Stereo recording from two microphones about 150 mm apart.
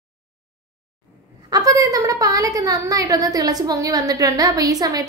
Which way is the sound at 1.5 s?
20° right (ahead or behind).